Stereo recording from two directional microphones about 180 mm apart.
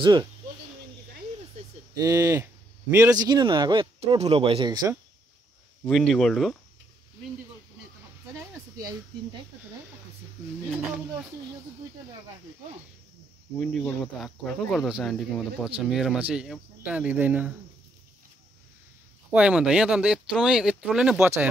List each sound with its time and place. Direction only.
0.0 s speech: 25° right (ahead or behind)
2.0 s speech: 20° right (ahead or behind)
5.9 s speech: centre (ahead or behind)
8.7 s speech: 20° right (ahead or behind)
13.6 s speech: 5° left (ahead or behind); by 17.5 s 10° right (ahead or behind)
19.3 s speech: 5° right (ahead or behind)